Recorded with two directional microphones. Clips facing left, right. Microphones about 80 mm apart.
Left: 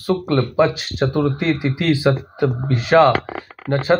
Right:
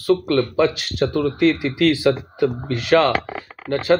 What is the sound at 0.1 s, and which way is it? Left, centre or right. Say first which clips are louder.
Speech: right 1 dB; centre.